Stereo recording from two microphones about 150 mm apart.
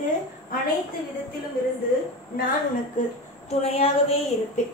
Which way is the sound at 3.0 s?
55° left (ahead or behind).